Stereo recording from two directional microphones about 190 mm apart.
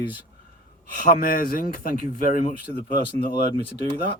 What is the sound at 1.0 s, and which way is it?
Speech, 50° left (ahead or behind).